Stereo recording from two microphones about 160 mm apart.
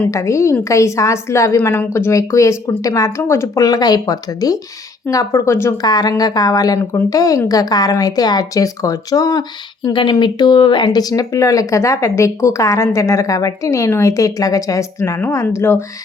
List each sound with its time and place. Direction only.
0.0 s speech: 20° left (ahead or behind)